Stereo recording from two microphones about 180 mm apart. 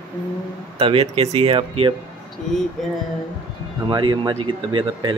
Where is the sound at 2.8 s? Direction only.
Centre (ahead or behind).